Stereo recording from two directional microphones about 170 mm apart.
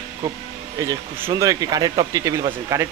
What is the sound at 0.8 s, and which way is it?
Speech, 20° right (ahead or behind).